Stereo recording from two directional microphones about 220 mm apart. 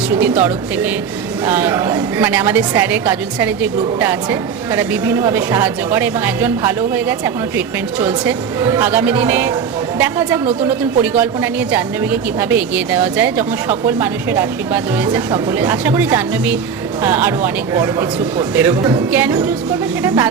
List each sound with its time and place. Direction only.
0.1 s a woman's voice: 10° right (ahead or behind)
12.4 s a woman's voice: 10° right (ahead or behind)